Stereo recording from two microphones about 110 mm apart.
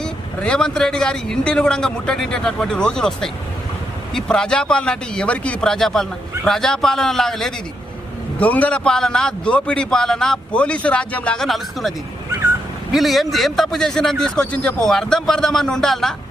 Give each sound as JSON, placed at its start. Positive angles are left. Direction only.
{"t": 0.0, "sound": "a man's voice", "side_deg": 5}